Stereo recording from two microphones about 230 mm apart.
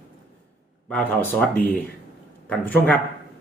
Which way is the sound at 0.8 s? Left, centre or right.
Centre.